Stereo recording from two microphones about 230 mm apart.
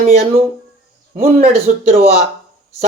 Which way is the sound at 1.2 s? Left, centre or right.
Right.